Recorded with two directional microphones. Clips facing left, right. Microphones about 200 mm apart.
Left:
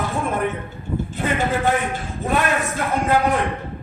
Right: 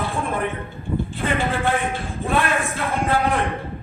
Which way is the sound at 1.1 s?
40° left (ahead or behind).